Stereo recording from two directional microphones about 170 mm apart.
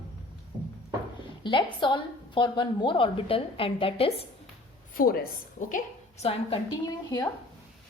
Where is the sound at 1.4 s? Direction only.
30° left (ahead or behind).